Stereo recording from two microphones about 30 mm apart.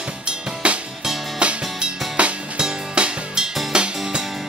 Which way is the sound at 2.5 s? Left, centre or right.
Right.